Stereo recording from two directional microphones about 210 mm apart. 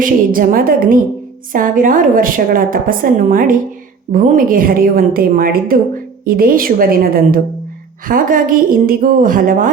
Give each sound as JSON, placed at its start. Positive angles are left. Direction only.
{"t": 0.0, "sound": "a woman's voice", "side_deg": -40}